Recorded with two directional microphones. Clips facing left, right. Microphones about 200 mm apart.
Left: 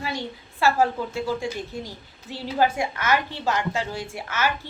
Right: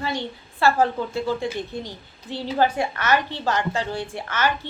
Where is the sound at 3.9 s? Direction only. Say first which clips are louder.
Right 3 dB; 35° right (ahead or behind).